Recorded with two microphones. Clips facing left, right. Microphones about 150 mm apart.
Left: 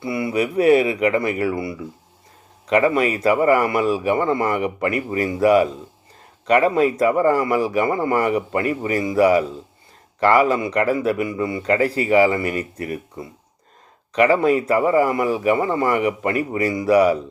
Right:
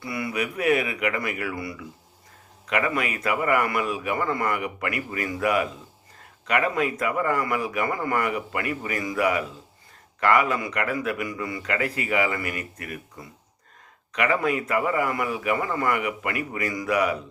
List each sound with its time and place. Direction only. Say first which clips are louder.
0.0 s a man's voice: left 7 dB; 25° left (ahead or behind)